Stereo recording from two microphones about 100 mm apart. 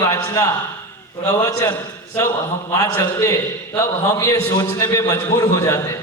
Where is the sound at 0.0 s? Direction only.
35° left (ahead or behind).